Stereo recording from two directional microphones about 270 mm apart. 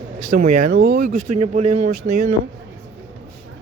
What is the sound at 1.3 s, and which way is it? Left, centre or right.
Speech, right.